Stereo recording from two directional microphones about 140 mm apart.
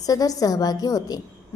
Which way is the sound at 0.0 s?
25° left (ahead or behind).